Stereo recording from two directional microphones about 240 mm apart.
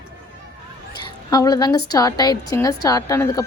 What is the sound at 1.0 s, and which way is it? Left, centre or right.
A woman's voice, centre.